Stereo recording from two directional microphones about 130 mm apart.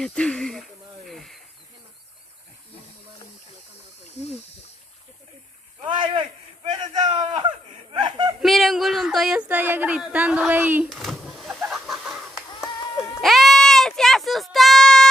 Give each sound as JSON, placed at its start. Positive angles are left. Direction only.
{"t": 0.0, "sound": "speech", "side_deg": 5}
{"t": 6.8, "sound": "a sound", "side_deg": -35}
{"t": 8.4, "sound": "speech", "side_deg": 0}
{"t": 10.9, "sound": "a sound", "side_deg": 0}
{"t": 11.7, "sound": "chicken", "side_deg": 0}
{"t": 13.1, "sound": "sheep", "side_deg": 0}